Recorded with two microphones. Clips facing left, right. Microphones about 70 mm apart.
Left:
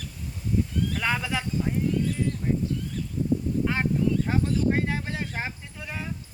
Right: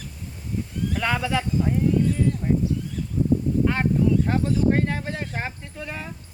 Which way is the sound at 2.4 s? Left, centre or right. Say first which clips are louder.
Right 3 dB; centre.